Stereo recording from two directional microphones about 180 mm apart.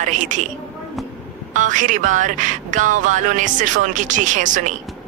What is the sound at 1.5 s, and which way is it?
Speech, 45° right (ahead or behind).